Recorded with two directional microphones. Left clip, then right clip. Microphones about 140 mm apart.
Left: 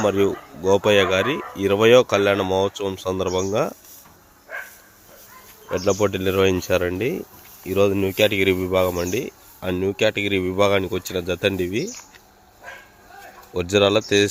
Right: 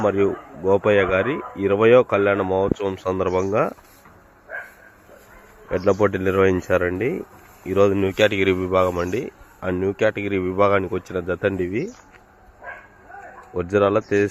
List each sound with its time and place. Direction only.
0.0 s speech: 35° left (ahead or behind)
2.7 s speech: 15° left (ahead or behind)
5.7 s speech: 10° left (ahead or behind); by 7.8 s 30° left (ahead or behind)
7.8 s speech: 15° left (ahead or behind); by 11.9 s 30° left (ahead or behind)
13.5 s speech: 45° left (ahead or behind)